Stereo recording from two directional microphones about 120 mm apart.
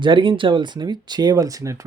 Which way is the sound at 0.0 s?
40° right (ahead or behind).